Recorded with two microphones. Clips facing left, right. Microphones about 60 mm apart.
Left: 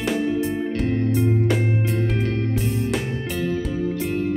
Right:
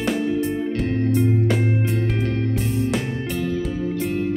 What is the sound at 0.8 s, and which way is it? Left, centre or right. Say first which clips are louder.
Music: right 1 dB; centre.